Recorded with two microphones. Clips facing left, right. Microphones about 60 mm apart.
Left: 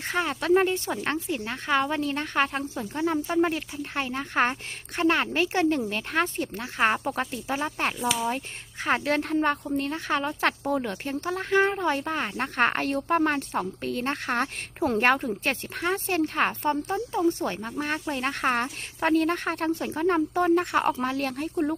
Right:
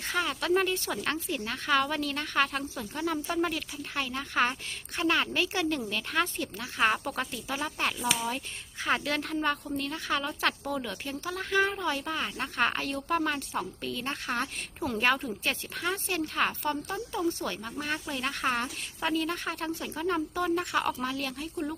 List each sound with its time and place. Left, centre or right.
0.1 s speech: left
21.5 s speech: left